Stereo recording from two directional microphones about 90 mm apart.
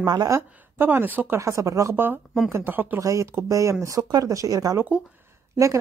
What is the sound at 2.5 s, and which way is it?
Speech, 20° right (ahead or behind).